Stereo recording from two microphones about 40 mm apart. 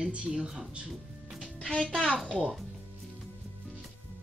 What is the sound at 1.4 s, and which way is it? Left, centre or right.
Speech, left.